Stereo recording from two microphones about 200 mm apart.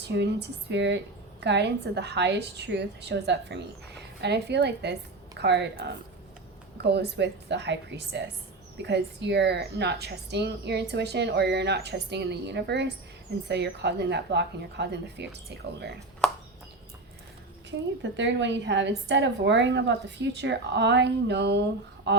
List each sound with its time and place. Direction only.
0.0 s a woman's voice: 60° right (ahead or behind)
17.7 s a woman's voice: 65° right (ahead or behind)